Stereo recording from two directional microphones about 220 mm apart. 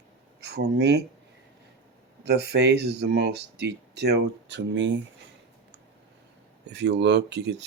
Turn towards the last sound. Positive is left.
turn(degrees=-50)  # may be behind; listen again after turning